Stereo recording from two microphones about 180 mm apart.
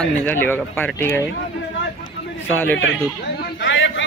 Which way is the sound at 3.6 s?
90° left.